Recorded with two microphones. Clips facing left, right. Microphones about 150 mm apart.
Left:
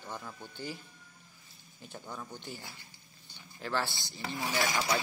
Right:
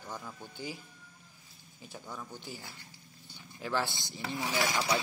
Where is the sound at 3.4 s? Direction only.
10° right (ahead or behind).